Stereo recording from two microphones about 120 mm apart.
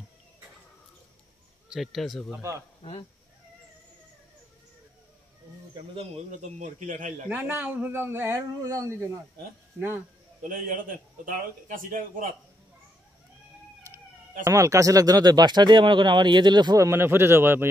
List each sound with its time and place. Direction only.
1.7 s speech: centre (ahead or behind)
2.8 s speech: 50° left (ahead or behind)
5.9 s a man's voice: 75° right (ahead or behind); by 7.2 s 90° right
7.2 s speech: 15° right (ahead or behind)
9.8 s speech: 15° right (ahead or behind)
11.2 s a man's voice: 90° right
13.9 s speech: 25° right (ahead or behind)